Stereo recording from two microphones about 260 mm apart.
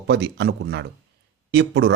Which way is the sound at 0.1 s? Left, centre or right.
Right.